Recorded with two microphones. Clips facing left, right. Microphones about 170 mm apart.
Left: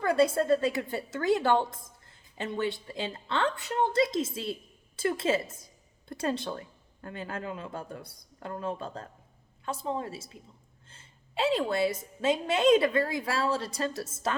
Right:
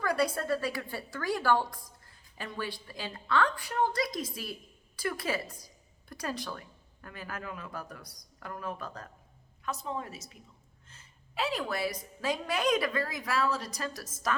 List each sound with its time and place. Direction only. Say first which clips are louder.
0.0 s a woman's voice: left 5 dB; 25° left (ahead or behind)